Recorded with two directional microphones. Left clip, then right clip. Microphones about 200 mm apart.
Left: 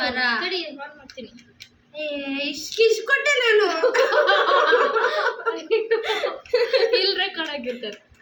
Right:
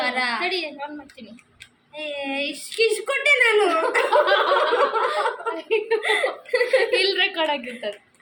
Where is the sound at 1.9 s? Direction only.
Centre (ahead or behind).